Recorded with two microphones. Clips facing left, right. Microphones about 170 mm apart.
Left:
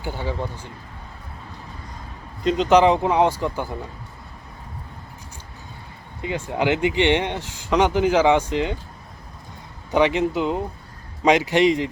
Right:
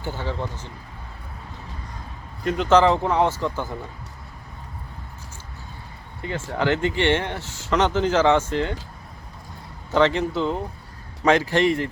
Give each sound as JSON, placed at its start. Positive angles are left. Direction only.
{"t": 0.0, "sound": "speech", "side_deg": 15}
{"t": 2.4, "sound": "speech", "side_deg": 20}
{"t": 6.5, "sound": "speech", "side_deg": 15}
{"t": 9.9, "sound": "speech", "side_deg": 15}